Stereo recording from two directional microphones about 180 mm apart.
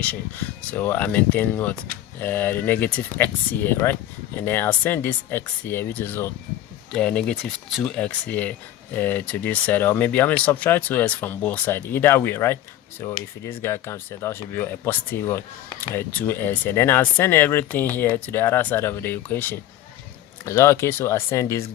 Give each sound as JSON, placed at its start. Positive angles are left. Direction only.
{"t": 0.1, "sound": "speech", "side_deg": 10}